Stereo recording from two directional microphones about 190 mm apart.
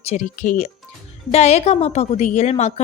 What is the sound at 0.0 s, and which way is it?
A woman's voice, 35° left (ahead or behind).